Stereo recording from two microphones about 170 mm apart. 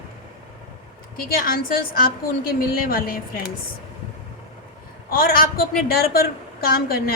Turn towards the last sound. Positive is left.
turn(degrees=60)  # may be behind; listen again after turning